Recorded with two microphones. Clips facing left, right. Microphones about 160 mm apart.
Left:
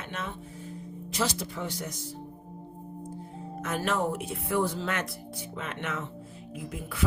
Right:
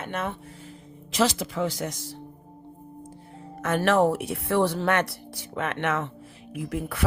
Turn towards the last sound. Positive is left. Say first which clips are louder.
# right 7 dB
turn(degrees=-65)  # may be behind; listen again after turning